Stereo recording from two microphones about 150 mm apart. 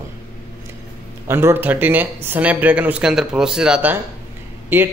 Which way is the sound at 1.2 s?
15° right (ahead or behind).